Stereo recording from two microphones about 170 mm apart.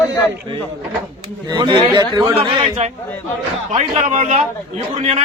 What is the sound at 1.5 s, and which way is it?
A man's voice, 25° right (ahead or behind).